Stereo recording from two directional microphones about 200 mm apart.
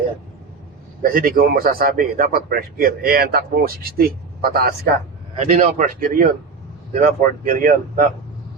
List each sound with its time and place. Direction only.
1.0 s speech: 45° right (ahead or behind)
5.4 s speech: 35° right (ahead or behind)